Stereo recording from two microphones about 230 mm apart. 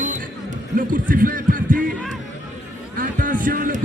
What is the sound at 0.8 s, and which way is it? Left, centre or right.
Music, right.